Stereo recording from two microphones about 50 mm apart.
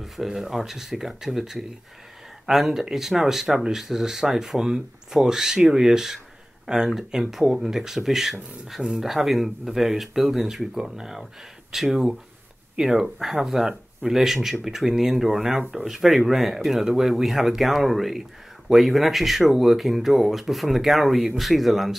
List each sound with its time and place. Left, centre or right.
0.0 s speech: centre